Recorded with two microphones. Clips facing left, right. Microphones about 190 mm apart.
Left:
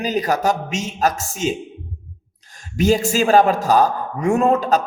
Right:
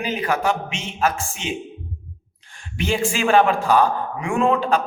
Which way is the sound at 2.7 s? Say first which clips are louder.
Left 6 dB; 40° left (ahead or behind).